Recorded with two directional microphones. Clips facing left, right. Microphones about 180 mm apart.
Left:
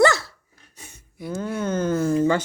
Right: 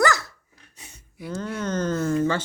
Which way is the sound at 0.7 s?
45° left (ahead or behind).